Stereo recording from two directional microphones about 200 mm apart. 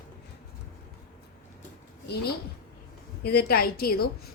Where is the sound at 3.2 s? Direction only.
50° left (ahead or behind).